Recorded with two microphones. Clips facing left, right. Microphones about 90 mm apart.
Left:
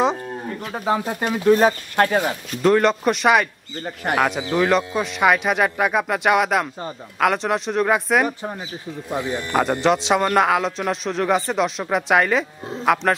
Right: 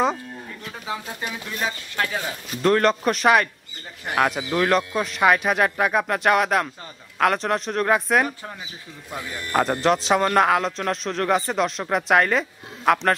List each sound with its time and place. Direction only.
0.7 s speech: 50° left (ahead or behind)
2.5 s a man's voice: centre (ahead or behind)
4.1 s a man's voice: 60° left (ahead or behind)
4.6 s a man's voice: centre (ahead or behind)
8.3 s speech: 20° left (ahead or behind)
9.6 s a man's voice: centre (ahead or behind)